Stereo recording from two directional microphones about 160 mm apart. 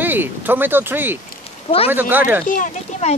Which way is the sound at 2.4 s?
55° left (ahead or behind).